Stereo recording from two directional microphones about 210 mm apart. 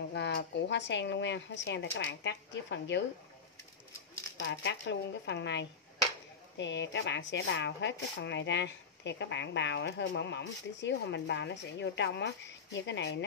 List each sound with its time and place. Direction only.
0.1 s speech: 55° left (ahead or behind)
4.4 s speech: 60° left (ahead or behind)